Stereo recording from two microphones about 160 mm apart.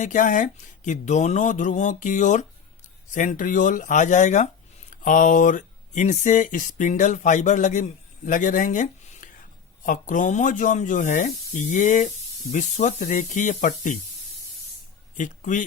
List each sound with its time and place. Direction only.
0.0 s speech: 55° left (ahead or behind)
15.1 s speech: 55° left (ahead or behind)